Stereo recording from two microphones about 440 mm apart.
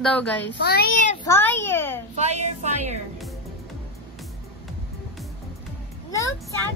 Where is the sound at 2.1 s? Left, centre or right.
Centre.